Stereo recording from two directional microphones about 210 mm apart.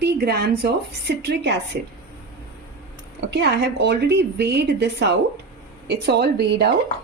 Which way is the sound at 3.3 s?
55° right (ahead or behind).